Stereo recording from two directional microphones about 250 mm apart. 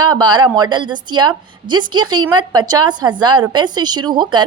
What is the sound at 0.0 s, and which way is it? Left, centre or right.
A woman's voice, centre.